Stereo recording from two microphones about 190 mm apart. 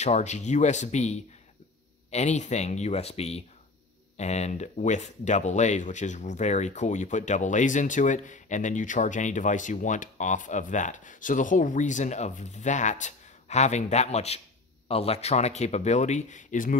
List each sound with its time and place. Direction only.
0.0 s speech: 35° left (ahead or behind)